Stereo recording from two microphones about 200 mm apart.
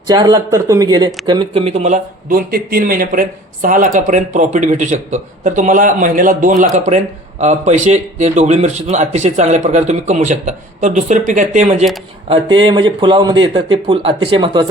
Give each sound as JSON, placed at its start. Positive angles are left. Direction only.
{"t": 0.1, "sound": "a man's voice", "side_deg": -20}
{"t": 12.3, "sound": "speech", "side_deg": -25}